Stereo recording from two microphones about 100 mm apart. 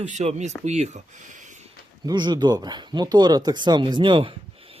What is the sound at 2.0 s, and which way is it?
Speech, 45° right (ahead or behind).